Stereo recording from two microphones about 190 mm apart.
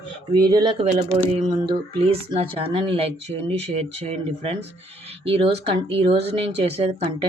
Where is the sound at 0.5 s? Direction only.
25° right (ahead or behind).